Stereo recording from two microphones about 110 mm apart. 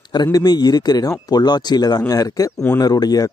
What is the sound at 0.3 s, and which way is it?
Speech, 35° left (ahead or behind).